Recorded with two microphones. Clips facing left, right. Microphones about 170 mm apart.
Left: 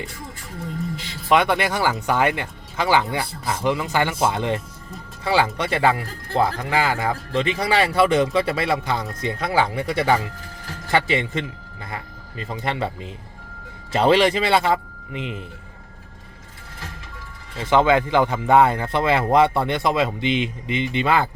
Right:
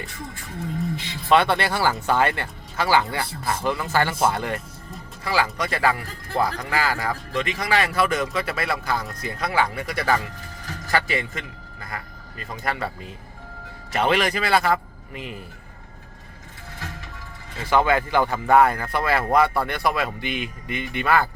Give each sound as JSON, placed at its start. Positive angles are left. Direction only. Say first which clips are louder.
{"t": 1.3, "sound": "a man's voice", "louder": "even", "side_deg": 15}
{"t": 17.7, "sound": "speech", "louder": "left 3 dB", "side_deg": 20}